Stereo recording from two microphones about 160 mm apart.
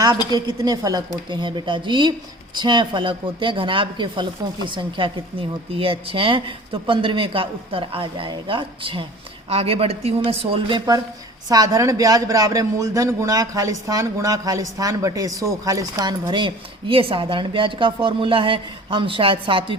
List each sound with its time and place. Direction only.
0.3 s a man's voice: 25° right (ahead or behind)